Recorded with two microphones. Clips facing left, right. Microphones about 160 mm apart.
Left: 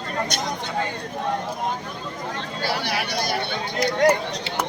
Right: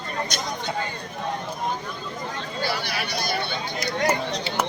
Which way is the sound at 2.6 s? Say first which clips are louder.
Left 2 dB; 90° left.